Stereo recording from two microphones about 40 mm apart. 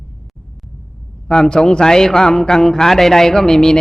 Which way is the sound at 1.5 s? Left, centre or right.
Centre.